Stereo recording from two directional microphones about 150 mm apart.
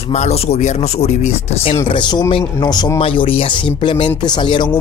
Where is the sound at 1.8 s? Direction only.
30° left (ahead or behind).